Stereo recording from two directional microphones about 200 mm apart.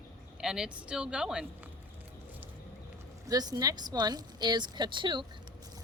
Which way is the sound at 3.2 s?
20° right (ahead or behind).